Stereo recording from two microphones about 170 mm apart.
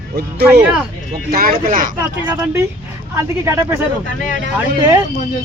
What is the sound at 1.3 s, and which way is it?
Speech, 60° right (ahead or behind).